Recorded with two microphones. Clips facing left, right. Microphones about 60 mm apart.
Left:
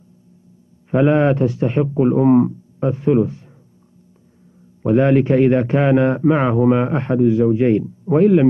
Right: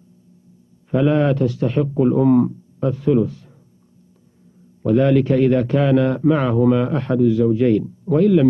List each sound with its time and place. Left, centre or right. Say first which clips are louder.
0.9 s a man's voice: left 2 dB; left
4.8 s a man's voice: left 1 dB; left